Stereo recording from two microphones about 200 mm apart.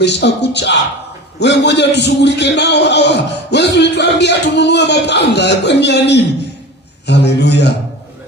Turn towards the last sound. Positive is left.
turn(degrees=60)  # may be behind; listen again after turning